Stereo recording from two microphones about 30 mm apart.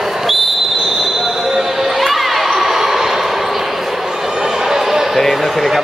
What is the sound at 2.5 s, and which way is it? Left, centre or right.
Basketball bounce, centre.